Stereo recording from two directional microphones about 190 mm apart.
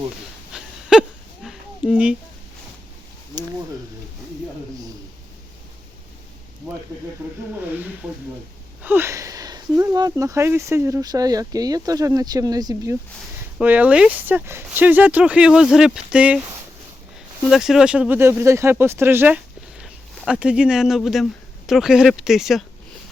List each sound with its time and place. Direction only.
0.5 s a sound: 5° right (ahead or behind)
7.5 s speech: 10° right (ahead or behind)
13.6 s speech: 10° right (ahead or behind)
17.5 s speech: centre (ahead or behind)